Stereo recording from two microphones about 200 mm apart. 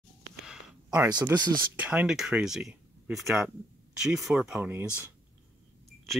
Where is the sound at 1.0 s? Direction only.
20° right (ahead or behind).